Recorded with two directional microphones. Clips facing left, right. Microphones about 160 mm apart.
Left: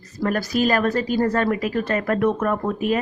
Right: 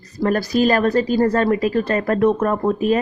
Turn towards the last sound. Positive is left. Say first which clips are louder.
# right 4 dB
turn(degrees=-35)  # may be behind; listen again after turning